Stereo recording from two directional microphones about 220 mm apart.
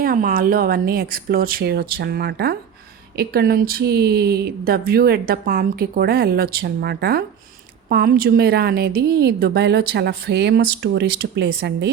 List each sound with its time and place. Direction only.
0.0 s speech: 40° right (ahead or behind)